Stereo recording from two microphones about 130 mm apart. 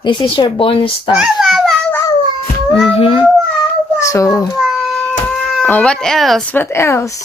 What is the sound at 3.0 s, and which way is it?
Speech, 50° left (ahead or behind).